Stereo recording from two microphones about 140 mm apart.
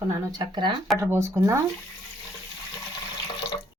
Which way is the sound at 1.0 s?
20° right (ahead or behind).